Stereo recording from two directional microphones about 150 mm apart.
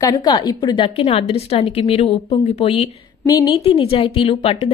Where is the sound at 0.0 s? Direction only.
30° left (ahead or behind).